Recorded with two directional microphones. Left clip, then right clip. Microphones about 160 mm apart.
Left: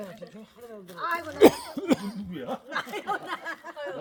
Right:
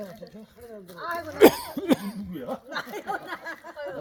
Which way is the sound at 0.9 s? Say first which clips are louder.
Left 2 dB; 15° right (ahead or behind).